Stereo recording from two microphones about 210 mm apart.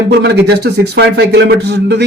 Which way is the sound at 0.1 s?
50° right (ahead or behind).